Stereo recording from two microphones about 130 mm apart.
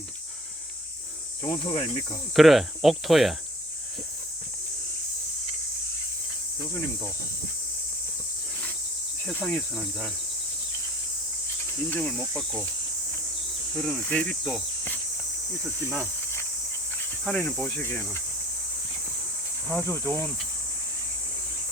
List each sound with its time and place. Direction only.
1.5 s cricket: 40° left (ahead or behind)
2.3 s cricket: centre (ahead or behind)
9.2 s cricket: 5° left (ahead or behind)
11.9 s cricket: 10° left (ahead or behind)
13.7 s cricket: centre (ahead or behind)
17.2 s cricket: 10° left (ahead or behind)
19.8 s cricket: 20° left (ahead or behind)